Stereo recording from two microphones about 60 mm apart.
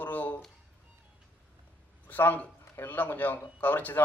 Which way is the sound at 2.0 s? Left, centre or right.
Left.